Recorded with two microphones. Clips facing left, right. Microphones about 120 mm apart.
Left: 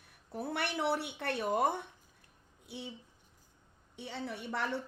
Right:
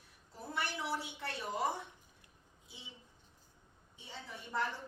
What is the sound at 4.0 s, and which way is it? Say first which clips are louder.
Speech: left 9 dB; 70° left (ahead or behind).